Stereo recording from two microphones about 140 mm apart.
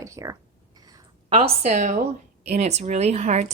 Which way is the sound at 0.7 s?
30° right (ahead or behind).